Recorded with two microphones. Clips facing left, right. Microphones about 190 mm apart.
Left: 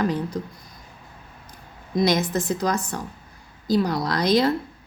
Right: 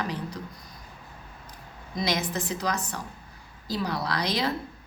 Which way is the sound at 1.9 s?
50° left (ahead or behind).